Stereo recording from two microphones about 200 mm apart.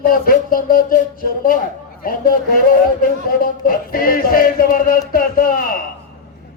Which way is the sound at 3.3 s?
45° left (ahead or behind).